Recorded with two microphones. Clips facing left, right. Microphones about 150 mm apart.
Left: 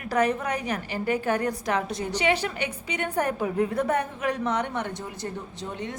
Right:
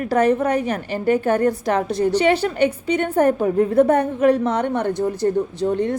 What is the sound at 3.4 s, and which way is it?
Speech, 40° right (ahead or behind).